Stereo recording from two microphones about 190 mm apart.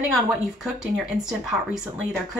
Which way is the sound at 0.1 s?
Centre (ahead or behind).